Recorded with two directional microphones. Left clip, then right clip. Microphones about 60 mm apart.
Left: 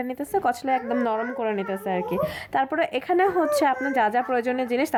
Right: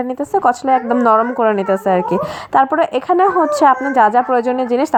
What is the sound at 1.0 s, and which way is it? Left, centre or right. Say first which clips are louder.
A woman's voice: right 13 dB; right.